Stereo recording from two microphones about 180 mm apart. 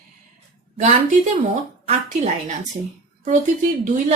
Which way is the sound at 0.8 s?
40° right (ahead or behind).